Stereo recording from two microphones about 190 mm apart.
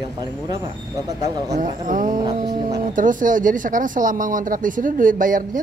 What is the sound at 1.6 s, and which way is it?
Speech, 45° right (ahead or behind).